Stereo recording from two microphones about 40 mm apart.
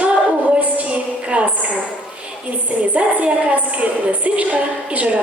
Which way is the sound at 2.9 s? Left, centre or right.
Right.